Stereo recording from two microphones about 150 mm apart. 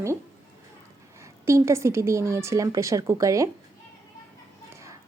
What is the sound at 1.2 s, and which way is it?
A woman's voice, 20° right (ahead or behind).